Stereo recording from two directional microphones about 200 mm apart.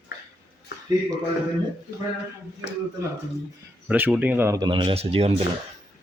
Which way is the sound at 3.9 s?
5° right (ahead or behind).